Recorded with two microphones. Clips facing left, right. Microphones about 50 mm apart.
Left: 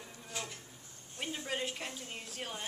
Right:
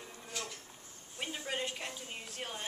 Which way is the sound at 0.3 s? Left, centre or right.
Centre.